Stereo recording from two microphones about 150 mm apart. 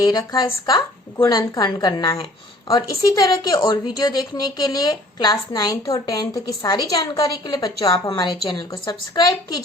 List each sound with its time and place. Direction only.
0.1 s a woman's voice: 25° left (ahead or behind)